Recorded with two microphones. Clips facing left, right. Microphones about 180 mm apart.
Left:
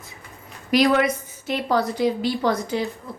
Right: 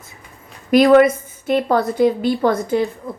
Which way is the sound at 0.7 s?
55° right (ahead or behind).